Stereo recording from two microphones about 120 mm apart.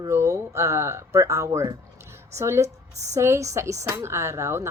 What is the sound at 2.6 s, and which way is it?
Speech, 70° right (ahead or behind).